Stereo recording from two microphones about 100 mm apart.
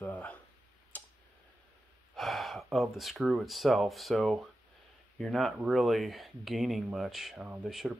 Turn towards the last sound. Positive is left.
turn(degrees=0)  # may be behind; listen again after turning